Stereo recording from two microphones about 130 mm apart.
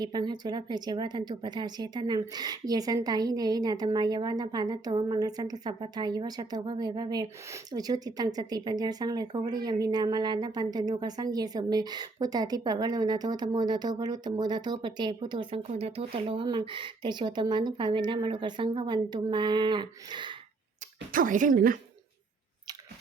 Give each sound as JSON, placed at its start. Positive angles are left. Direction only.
{"t": 0.0, "sound": "speech", "side_deg": -35}
{"t": 15.6, "sound": "speech", "side_deg": -55}
{"t": 21.1, "sound": "speech", "side_deg": -90}